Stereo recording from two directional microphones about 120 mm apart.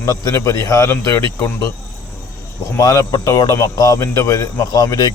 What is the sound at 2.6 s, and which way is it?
Speech, 30° left (ahead or behind).